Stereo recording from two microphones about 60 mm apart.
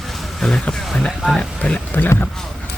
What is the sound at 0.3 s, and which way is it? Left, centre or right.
Speech, centre.